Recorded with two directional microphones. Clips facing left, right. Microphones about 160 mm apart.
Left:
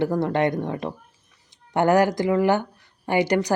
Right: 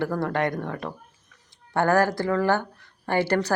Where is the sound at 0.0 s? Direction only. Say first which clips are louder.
Left 4 dB; 20° left (ahead or behind).